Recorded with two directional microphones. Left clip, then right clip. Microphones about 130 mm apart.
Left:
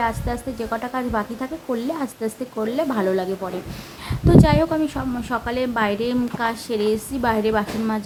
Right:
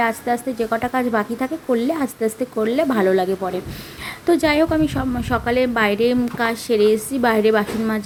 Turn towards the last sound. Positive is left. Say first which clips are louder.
# right 3 dB
turn(degrees=-25)  # may be behind; listen again after turning